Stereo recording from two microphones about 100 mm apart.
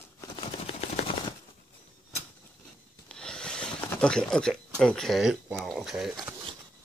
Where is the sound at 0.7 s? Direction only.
75° left (ahead or behind).